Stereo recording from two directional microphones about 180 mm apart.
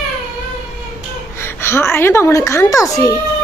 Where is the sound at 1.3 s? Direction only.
15° left (ahead or behind).